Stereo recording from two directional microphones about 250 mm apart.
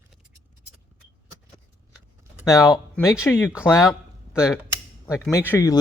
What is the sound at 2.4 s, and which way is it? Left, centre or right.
Speech, centre.